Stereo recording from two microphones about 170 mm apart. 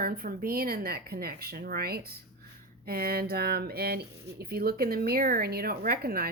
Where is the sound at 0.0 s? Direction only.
60° right (ahead or behind).